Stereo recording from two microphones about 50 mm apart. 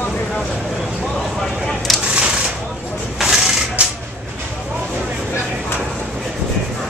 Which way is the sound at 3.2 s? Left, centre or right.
Centre.